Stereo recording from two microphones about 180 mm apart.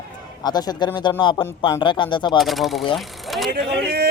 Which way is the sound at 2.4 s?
Centre (ahead or behind).